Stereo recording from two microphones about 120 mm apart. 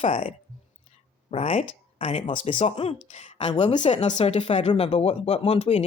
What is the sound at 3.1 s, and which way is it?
Speech, 70° left (ahead or behind).